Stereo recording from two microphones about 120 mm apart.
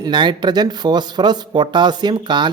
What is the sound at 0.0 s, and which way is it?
Speech, 40° right (ahead or behind).